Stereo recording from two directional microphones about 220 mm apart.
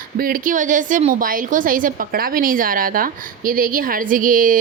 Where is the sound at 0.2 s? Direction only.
40° right (ahead or behind).